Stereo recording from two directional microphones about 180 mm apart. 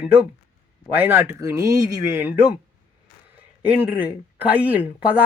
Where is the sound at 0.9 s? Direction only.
10° right (ahead or behind).